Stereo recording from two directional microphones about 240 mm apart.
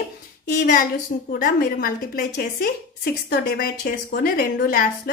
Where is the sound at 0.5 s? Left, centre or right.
Left.